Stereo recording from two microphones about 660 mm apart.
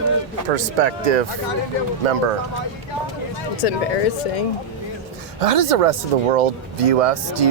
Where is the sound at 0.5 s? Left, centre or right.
Right.